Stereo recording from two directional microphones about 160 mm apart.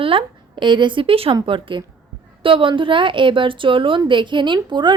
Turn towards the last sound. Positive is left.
turn(degrees=-30)  # may be behind; listen again after turning